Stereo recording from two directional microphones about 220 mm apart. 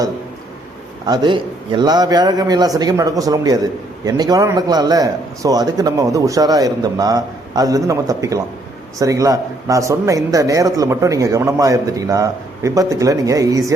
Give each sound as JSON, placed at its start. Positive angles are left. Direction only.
{"t": 1.0, "sound": "speech", "side_deg": -20}